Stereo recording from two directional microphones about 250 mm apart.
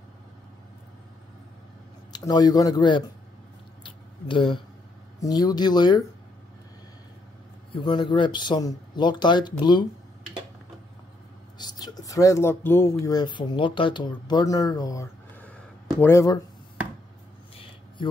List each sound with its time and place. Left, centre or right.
2.1 s speech: centre
3.8 s a sound: centre
5.2 s speech: centre
7.7 s speech: centre
11.5 s speech: centre